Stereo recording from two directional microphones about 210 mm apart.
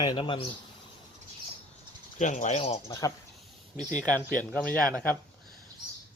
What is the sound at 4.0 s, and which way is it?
Speech, 5° left (ahead or behind).